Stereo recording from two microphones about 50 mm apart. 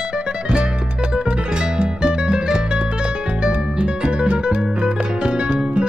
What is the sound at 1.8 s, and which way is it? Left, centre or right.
Music, centre.